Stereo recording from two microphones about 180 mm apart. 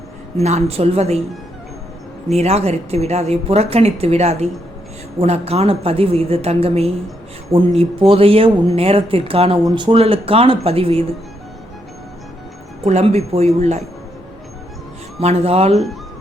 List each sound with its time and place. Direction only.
0.3 s speech: 35° right (ahead or behind)
2.3 s speech: 35° right (ahead or behind)
12.8 s speech: 35° right (ahead or behind)
15.2 s speech: 35° right (ahead or behind)